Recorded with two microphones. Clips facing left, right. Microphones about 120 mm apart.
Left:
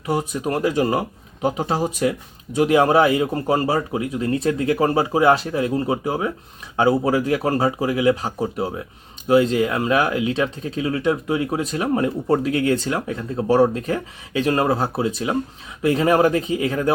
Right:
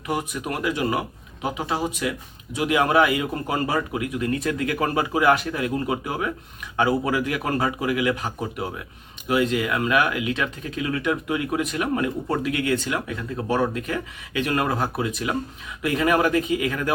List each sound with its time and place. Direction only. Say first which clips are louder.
0.1 s speech: left 5 dB; 30° left (ahead or behind)